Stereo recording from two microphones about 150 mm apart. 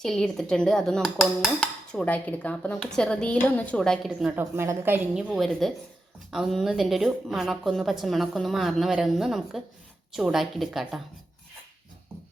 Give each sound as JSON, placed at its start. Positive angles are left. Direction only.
{"t": 0.0, "sound": "dishes", "side_deg": 5}
{"t": 4.4, "sound": "a woman's voice", "side_deg": -15}
{"t": 5.1, "sound": "dishes", "side_deg": 0}